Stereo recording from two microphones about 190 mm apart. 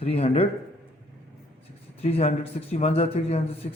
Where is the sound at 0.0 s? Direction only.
30° left (ahead or behind).